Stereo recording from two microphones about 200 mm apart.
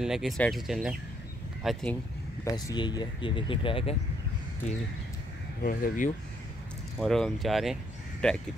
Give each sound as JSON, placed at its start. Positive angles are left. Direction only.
{"t": 0.0, "sound": "speech", "side_deg": 0}
{"t": 2.4, "sound": "speech", "side_deg": 20}
{"t": 5.6, "sound": "speech", "side_deg": 45}
{"t": 7.0, "sound": "speech", "side_deg": 0}